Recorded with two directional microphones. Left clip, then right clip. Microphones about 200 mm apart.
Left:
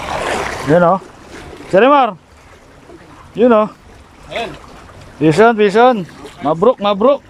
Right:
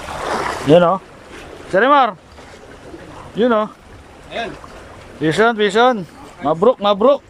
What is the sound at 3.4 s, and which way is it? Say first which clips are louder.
Speech: left 5 dB; 5° left (ahead or behind).